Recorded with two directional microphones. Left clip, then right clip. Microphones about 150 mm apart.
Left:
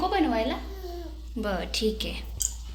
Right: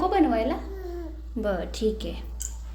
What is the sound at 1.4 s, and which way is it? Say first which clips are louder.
Speech: right 1 dB; 10° right (ahead or behind).